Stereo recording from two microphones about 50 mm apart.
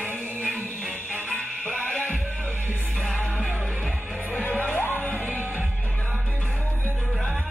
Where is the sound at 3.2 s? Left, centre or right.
Centre.